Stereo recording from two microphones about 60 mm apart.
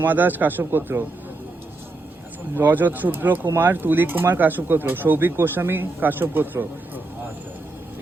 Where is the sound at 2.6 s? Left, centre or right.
Right.